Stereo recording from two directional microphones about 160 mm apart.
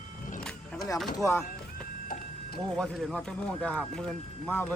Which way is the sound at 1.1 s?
20° left (ahead or behind).